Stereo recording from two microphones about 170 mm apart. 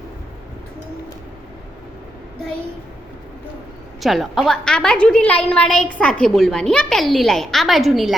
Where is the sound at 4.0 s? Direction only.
Centre (ahead or behind).